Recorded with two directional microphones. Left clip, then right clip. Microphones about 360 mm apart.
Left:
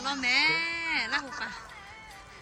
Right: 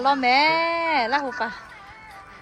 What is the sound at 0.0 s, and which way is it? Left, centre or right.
Speech, centre.